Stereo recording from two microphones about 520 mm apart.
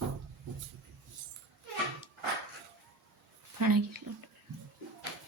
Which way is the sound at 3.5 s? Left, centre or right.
Right.